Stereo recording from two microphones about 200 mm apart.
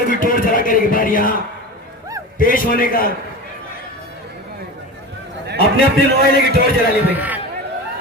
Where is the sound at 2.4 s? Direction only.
45° left (ahead or behind).